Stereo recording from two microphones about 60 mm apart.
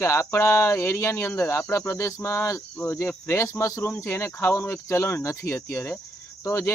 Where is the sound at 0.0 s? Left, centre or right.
Left.